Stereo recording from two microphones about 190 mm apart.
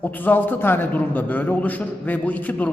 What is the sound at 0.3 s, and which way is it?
A man's voice, 10° left (ahead or behind).